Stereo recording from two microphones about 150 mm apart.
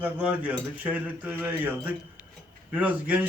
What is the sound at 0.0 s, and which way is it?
A man's voice, 10° right (ahead or behind).